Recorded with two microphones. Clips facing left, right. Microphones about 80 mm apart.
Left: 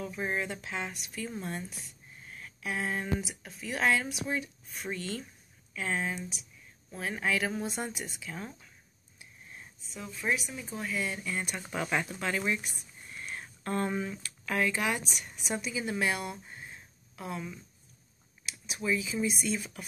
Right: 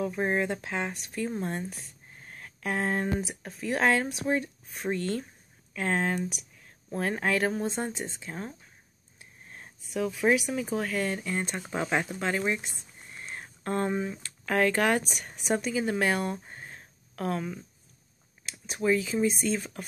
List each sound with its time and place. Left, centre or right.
0.0 s speech: right
7.6 s speech: right
9.2 s a sound: right
9.9 s speech: right
11.3 s speech: right
14.4 s speech: right
18.4 s speech: right